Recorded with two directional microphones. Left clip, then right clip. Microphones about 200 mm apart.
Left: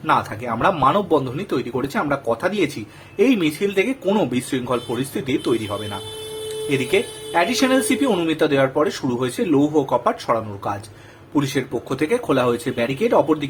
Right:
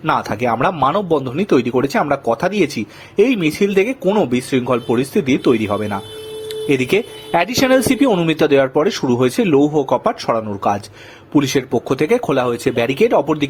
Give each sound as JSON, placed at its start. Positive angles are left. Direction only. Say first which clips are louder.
{"t": 0.0, "sound": "speech", "louder": "right 3 dB", "side_deg": -40}